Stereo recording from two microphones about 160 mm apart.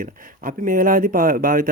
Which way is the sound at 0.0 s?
60° right (ahead or behind).